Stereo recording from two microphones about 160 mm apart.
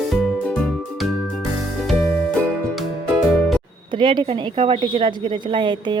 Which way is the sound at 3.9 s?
30° right (ahead or behind).